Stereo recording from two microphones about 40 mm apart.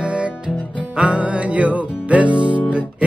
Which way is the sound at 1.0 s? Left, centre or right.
Right.